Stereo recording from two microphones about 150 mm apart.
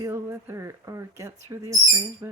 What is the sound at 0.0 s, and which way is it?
Speech, 15° right (ahead or behind).